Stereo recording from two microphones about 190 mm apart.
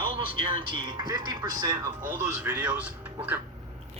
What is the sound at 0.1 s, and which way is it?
Speech, 25° right (ahead or behind).